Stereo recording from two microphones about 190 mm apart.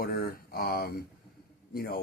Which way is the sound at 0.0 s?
55° left (ahead or behind).